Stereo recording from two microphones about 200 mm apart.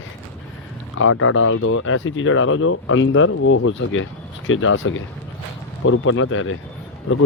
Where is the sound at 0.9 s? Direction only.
90° left.